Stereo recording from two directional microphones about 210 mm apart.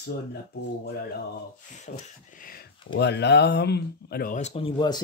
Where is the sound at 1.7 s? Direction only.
35° left (ahead or behind).